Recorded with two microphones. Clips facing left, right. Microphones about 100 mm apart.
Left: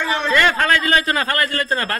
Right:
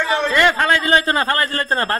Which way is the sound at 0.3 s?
20° right (ahead or behind).